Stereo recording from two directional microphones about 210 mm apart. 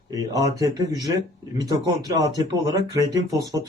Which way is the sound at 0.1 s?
15° right (ahead or behind).